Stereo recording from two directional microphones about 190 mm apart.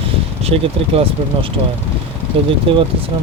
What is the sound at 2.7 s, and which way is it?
Speech, 30° right (ahead or behind).